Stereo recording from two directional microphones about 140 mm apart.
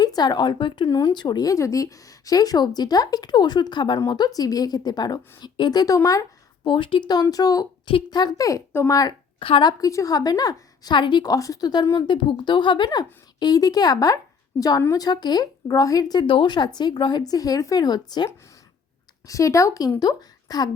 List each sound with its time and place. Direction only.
0.0 s speech: 30° left (ahead or behind)
6.7 s speech: 35° left (ahead or behind)
9.4 s speech: 35° left (ahead or behind)
19.3 s speech: 20° left (ahead or behind)